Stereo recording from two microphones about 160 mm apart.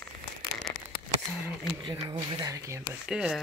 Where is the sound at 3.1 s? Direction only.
5° right (ahead or behind).